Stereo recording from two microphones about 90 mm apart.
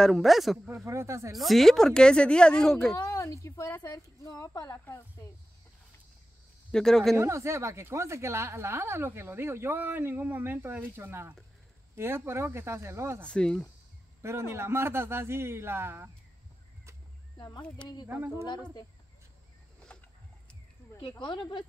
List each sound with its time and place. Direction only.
0.0 s speech: centre (ahead or behind)
0.8 s speech: 35° right (ahead or behind)
1.3 s speech: centre (ahead or behind)
3.0 s a woman's voice: 40° left (ahead or behind)
4.7 s speech: 25° left (ahead or behind)
6.7 s speech: 5° left (ahead or behind)
7.2 s speech: 30° right (ahead or behind)
13.3 s speech: 10° left (ahead or behind)
14.2 s speech: 30° right (ahead or behind)
18.0 s speech: 25° right (ahead or behind)
21.2 s speech: 55° left (ahead or behind)